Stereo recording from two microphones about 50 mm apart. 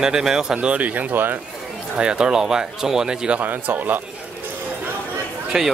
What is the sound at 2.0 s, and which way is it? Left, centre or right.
Speech, centre.